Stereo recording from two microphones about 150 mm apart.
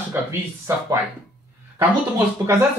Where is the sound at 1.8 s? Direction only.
20° right (ahead or behind).